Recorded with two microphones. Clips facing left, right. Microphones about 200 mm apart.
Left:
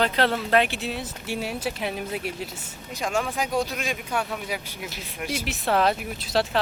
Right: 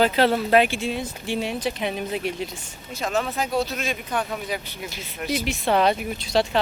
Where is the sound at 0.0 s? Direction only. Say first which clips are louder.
Right 4 dB; 5° right (ahead or behind).